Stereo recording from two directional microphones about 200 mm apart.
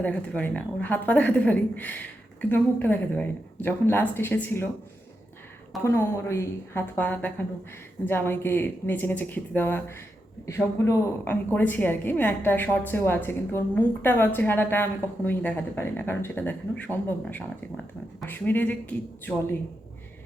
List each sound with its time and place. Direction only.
0.0 s a woman's voice: 10° left (ahead or behind)
5.8 s a woman's voice: 15° left (ahead or behind)